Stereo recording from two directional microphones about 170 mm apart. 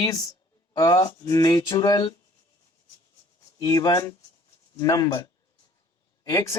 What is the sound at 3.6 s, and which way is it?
Speech, 20° left (ahead or behind).